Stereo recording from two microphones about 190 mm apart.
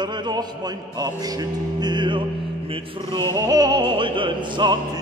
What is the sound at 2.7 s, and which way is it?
Mantra, 25° right (ahead or behind).